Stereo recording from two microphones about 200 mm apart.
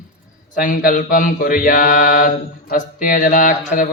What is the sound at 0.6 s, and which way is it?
Mantra, 45° left (ahead or behind).